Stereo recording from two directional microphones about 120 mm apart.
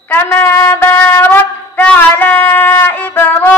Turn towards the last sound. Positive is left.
turn(degrees=15)  # may be behind; listen again after turning